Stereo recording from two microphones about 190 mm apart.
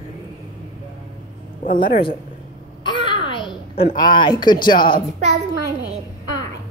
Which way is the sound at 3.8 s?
25° left (ahead or behind).